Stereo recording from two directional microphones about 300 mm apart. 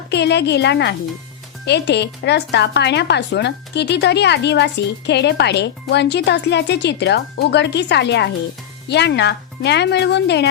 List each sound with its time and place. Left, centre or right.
0.1 s speech: left